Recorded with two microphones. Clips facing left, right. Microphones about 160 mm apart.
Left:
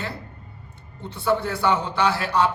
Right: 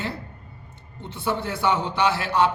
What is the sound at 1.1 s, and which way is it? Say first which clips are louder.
A man's voice: left 4 dB; 20° right (ahead or behind).